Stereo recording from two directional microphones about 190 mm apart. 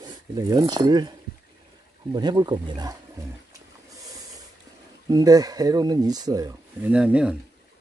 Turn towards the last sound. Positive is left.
turn(degrees=-5)  # may be behind; listen again after turning